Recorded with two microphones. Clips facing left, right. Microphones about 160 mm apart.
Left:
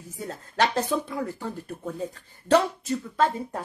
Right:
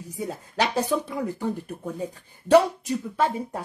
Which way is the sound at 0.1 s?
15° right (ahead or behind).